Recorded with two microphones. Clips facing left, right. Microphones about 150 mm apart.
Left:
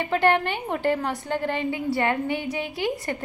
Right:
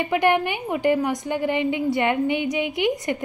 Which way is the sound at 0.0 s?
15° right (ahead or behind).